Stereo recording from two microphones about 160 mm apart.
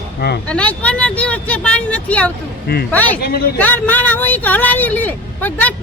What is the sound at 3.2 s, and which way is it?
Speech, 70° left (ahead or behind).